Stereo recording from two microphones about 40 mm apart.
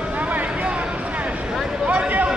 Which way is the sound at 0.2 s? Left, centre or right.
Right.